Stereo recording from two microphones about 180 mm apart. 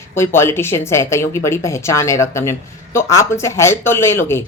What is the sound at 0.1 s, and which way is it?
Speech, 15° left (ahead or behind).